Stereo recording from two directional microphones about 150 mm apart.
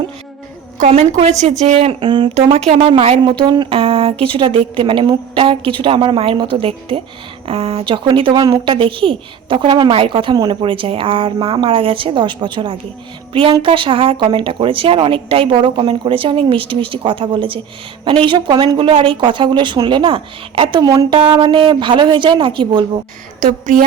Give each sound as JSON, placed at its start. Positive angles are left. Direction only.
{"t": 0.8, "sound": "a woman's voice", "side_deg": -55}
{"t": 23.4, "sound": "a woman's voice", "side_deg": -55}